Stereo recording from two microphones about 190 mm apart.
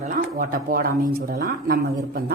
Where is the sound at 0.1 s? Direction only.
45° right (ahead or behind).